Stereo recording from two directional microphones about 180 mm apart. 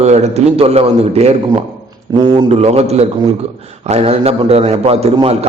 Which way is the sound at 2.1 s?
20° right (ahead or behind).